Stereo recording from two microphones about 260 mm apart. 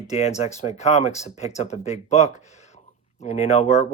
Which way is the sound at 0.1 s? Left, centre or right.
Left.